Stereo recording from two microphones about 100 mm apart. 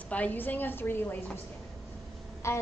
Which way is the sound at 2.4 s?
30° left (ahead or behind).